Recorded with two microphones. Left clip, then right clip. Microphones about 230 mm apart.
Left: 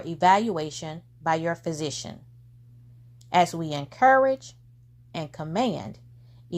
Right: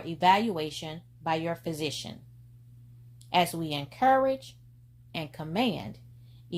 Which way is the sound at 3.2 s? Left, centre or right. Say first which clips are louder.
Left 4 dB; left.